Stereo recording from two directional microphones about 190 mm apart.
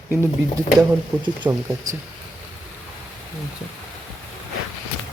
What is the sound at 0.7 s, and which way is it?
Speech, 20° right (ahead or behind).